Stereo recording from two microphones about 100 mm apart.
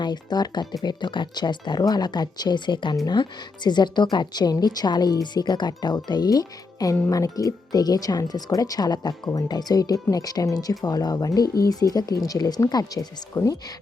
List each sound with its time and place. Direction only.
0.0 s a woman's voice: 45° left (ahead or behind)